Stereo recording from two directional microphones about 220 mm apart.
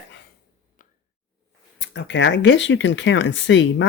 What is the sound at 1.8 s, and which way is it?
Speech, 55° left (ahead or behind).